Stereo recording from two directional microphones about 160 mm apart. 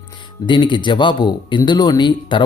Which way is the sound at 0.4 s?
30° left (ahead or behind).